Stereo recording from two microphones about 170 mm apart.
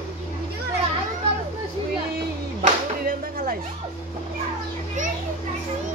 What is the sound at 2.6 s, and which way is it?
Speech, 55° right (ahead or behind).